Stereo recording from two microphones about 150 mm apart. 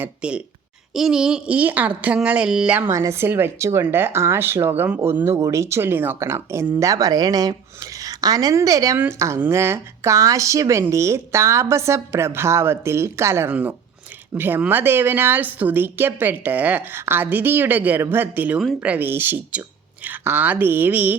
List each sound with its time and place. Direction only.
0.0 s a woman's voice: 5° right (ahead or behind)
2.9 s a woman's voice: 20° right (ahead or behind)